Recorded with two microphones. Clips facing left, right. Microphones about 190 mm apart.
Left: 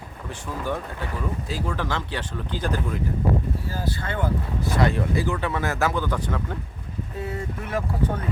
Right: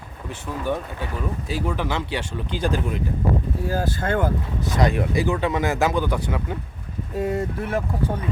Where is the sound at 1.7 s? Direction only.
10° right (ahead or behind).